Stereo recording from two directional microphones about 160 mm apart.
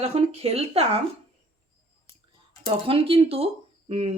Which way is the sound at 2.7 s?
35° right (ahead or behind).